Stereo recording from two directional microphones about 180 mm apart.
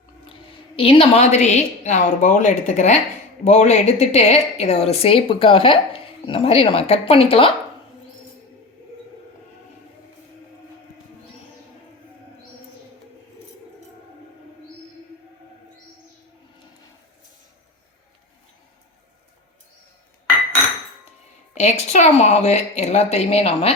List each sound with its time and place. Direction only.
0.3 s a woman's voice: 30° left (ahead or behind)
21.5 s a woman's voice: 40° left (ahead or behind)